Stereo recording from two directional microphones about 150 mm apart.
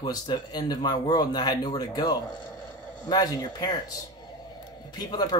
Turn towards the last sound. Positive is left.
turn(degrees=25)  # may be behind; listen again after turning